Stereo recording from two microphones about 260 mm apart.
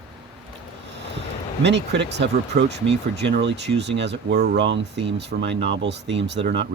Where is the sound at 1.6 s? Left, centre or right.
Right.